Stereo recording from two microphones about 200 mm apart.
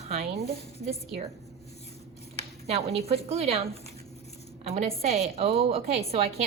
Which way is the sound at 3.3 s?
30° right (ahead or behind).